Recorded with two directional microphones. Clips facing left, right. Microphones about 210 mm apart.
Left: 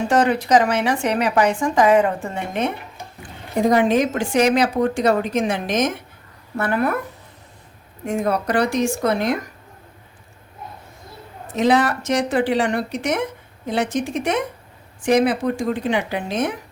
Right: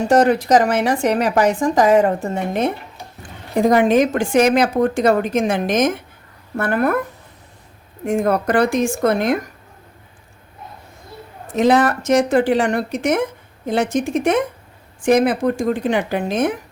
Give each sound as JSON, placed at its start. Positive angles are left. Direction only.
{"t": 0.1, "sound": "a woman's voice", "side_deg": -45}
{"t": 3.7, "sound": "a woman's voice", "side_deg": -50}
{"t": 8.0, "sound": "a woman's voice", "side_deg": -50}
{"t": 11.5, "sound": "a woman's voice", "side_deg": -50}